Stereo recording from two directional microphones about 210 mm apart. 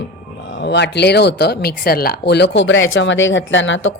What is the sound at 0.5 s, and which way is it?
A woman's voice, 55° left (ahead or behind).